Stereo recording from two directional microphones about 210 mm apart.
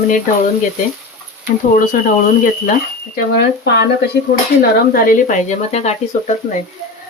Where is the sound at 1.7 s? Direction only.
40° left (ahead or behind).